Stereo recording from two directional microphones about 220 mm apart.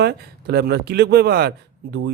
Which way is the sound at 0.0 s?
45° right (ahead or behind).